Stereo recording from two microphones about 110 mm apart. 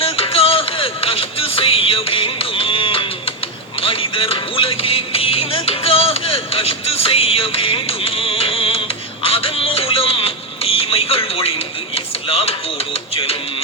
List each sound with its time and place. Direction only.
0.0 s music: 60° left (ahead or behind)